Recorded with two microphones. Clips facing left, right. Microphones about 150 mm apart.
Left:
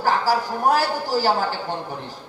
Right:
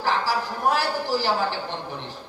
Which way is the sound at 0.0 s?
45° left (ahead or behind).